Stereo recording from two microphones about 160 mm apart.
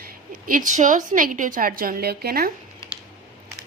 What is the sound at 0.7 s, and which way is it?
A woman's voice, 50° right (ahead or behind).